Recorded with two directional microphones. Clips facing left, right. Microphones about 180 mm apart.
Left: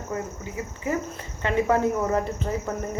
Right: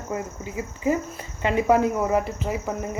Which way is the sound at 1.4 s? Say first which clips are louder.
Right 2 dB; 15° right (ahead or behind).